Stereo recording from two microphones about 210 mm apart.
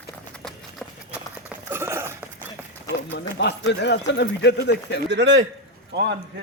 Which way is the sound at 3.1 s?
55° left (ahead or behind).